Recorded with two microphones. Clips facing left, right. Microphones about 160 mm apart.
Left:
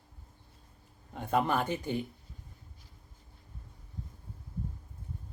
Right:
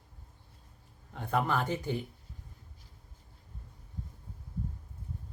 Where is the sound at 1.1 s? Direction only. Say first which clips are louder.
Left 2 dB; 20° left (ahead or behind).